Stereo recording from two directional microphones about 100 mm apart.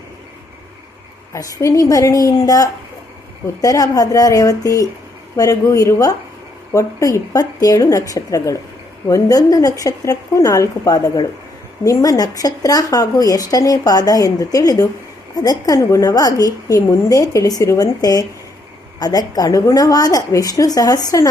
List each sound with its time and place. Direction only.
1.3 s speech: 35° left (ahead or behind)